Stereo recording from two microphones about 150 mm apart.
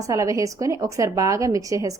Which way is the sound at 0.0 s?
20° right (ahead or behind).